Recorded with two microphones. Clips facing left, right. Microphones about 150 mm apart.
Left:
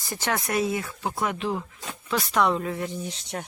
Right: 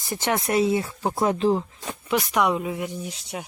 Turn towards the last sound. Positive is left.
turn(degrees=-5)  # may be behind; listen again after turning